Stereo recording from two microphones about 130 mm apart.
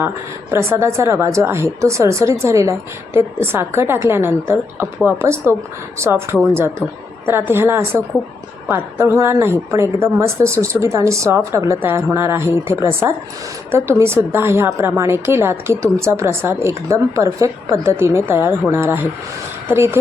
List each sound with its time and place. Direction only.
0.5 s a woman's voice: 20° right (ahead or behind)